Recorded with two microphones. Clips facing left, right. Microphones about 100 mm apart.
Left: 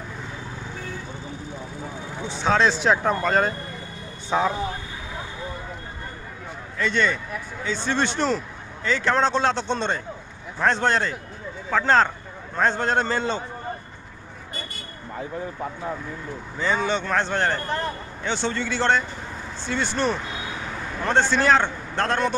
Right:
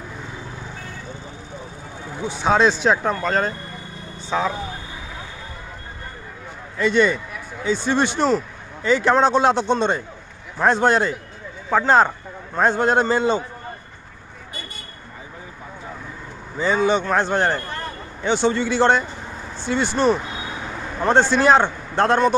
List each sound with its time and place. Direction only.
2.2 s a man's voice: 10° right (ahead or behind); by 4.6 s 10° left (ahead or behind)
6.8 s a man's voice: 15° right (ahead or behind)
16.5 s a man's voice: 10° right (ahead or behind)